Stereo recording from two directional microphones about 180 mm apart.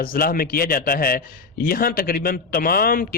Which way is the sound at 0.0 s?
55° left (ahead or behind).